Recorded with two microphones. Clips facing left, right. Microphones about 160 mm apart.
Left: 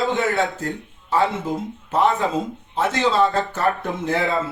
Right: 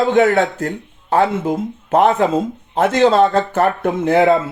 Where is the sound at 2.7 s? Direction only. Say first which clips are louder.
Right 7 dB; 65° right (ahead or behind).